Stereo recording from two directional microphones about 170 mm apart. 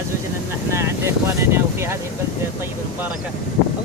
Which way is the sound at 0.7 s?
15° right (ahead or behind).